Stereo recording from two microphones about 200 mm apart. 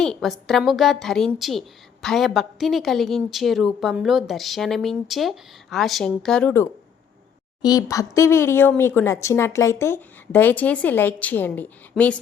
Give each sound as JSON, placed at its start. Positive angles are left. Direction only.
{"t": 0.0, "sound": "a woman's voice", "side_deg": 0}